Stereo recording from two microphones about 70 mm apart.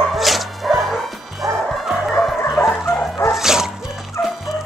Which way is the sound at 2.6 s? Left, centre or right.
Left.